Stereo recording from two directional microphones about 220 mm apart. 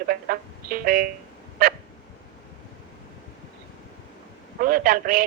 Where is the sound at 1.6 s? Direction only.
40° right (ahead or behind).